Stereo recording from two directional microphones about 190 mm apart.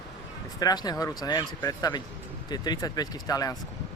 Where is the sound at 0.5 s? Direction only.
20° left (ahead or behind).